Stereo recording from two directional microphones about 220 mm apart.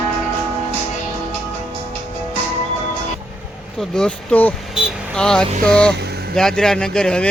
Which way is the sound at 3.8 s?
5° left (ahead or behind).